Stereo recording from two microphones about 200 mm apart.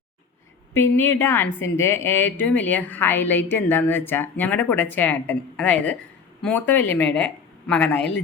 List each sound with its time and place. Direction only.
0.7 s a woman's voice: 10° left (ahead or behind)